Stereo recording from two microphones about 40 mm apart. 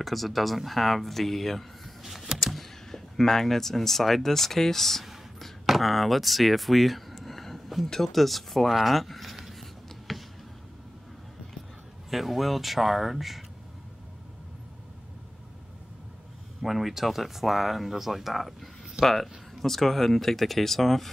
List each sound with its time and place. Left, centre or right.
0.0 s speech: centre
9.5 s a sound: centre
12.1 s speech: centre
16.6 s speech: centre